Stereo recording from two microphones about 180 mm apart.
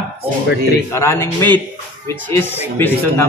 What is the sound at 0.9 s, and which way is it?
Speech, 15° left (ahead or behind).